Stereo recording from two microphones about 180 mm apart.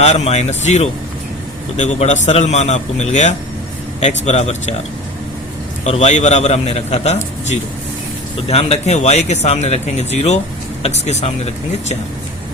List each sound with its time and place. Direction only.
0.0 s speech: 35° left (ahead or behind)
5.8 s speech: 40° left (ahead or behind)